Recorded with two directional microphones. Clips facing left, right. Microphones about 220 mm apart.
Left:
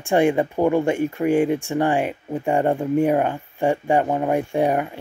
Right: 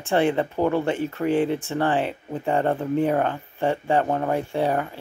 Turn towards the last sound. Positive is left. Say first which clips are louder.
# left 3 dB
turn(degrees=15)  # may be behind; listen again after turning